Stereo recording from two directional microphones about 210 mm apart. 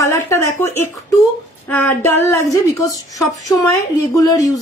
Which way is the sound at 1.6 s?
10° left (ahead or behind).